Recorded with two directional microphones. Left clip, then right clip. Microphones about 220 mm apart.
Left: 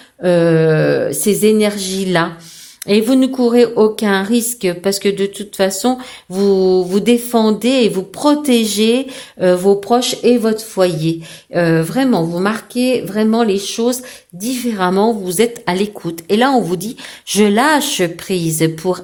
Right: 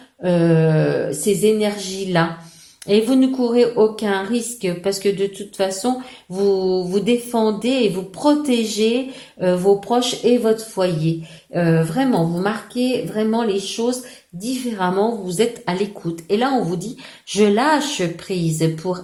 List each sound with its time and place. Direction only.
0.2 s speech: 45° left (ahead or behind)